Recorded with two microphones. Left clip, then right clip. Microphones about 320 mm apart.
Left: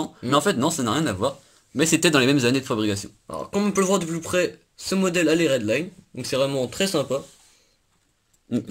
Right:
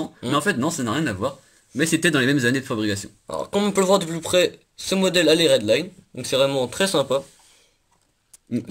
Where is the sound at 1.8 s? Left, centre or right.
Centre.